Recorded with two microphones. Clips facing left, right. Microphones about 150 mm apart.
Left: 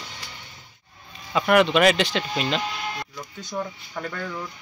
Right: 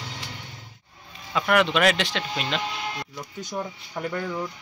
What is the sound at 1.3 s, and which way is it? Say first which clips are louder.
Speech: left 3 dB; 5° left (ahead or behind).